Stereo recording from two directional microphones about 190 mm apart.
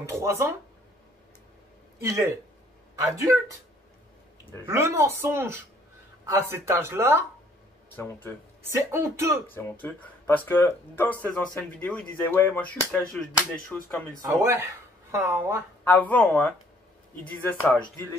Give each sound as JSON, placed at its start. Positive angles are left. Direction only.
{"t": 0.0, "sound": "speech", "side_deg": -15}
{"t": 2.0, "sound": "speech", "side_deg": -15}
{"t": 4.6, "sound": "speech", "side_deg": -15}
{"t": 7.9, "sound": "speech", "side_deg": 10}
{"t": 8.6, "sound": "speech", "side_deg": -15}
{"t": 9.5, "sound": "speech", "side_deg": 10}
{"t": 14.2, "sound": "speech", "side_deg": -15}
{"t": 15.8, "sound": "speech", "side_deg": 10}